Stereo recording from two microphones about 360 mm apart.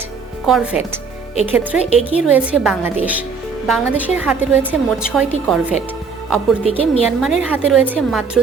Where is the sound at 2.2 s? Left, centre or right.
Centre.